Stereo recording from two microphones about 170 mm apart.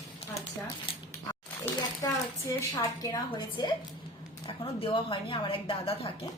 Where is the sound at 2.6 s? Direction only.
20° left (ahead or behind).